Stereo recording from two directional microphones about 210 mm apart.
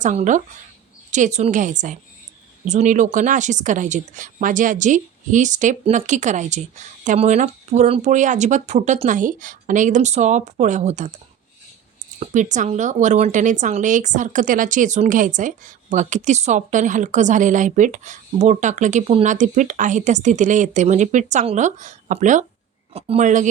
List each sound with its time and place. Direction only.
0.0 s speech: 35° right (ahead or behind)
12.2 s speech: 35° right (ahead or behind)